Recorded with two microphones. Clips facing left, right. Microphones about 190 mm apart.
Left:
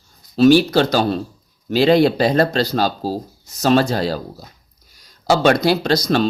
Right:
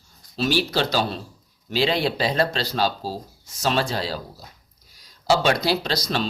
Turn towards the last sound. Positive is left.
turn(degrees=45)  # may be behind; listen again after turning